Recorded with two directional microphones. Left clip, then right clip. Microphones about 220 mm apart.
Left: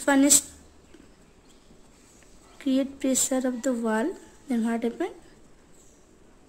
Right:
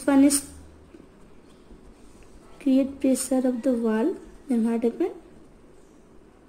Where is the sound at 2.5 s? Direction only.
20° left (ahead or behind).